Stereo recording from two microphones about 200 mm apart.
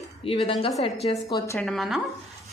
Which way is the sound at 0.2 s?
25° left (ahead or behind).